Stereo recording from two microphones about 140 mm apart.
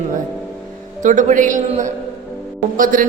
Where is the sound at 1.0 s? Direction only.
65° right (ahead or behind).